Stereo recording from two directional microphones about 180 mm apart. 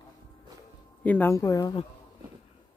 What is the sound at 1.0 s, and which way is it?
Speech, 10° left (ahead or behind).